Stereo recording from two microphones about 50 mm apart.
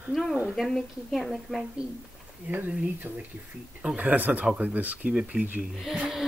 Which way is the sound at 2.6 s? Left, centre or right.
Right.